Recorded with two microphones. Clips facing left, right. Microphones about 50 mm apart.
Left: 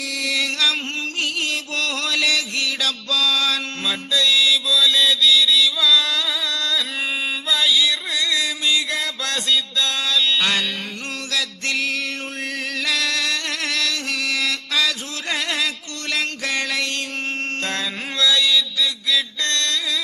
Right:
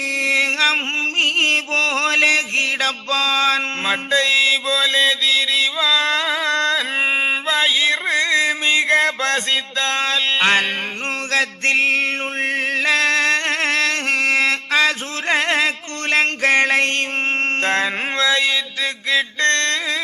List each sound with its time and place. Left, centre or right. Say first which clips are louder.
0.2 s music: right 5 dB; right
1.2 s mantra: right 7 dB; right
11.3 s a sound: right 7 dB; right
17.6 s mantra: right 7 dB; right